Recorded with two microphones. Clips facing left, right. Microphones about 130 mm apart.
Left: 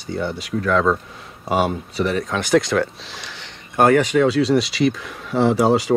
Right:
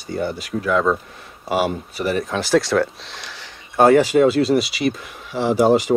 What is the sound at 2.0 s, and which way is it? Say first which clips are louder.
Speech: even; 60° right (ahead or behind).